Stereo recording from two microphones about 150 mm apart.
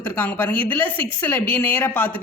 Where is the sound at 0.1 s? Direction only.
10° left (ahead or behind).